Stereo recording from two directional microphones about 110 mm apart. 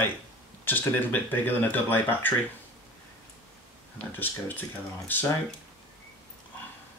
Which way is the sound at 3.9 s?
15° left (ahead or behind).